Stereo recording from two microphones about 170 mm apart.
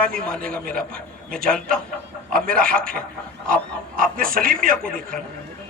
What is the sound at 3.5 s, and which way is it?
Speech, 55° right (ahead or behind).